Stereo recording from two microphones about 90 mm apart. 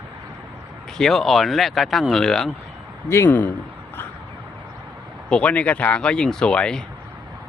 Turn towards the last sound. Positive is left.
turn(degrees=10)  # may be behind; listen again after turning